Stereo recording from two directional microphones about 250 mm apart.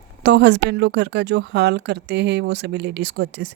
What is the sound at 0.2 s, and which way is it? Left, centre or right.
Speech, right.